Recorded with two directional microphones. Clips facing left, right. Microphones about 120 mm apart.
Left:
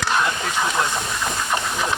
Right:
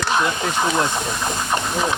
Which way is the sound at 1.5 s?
20° right (ahead or behind).